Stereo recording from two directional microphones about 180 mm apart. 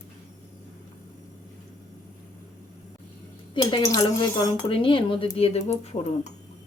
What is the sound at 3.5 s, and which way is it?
Speech, 25° left (ahead or behind).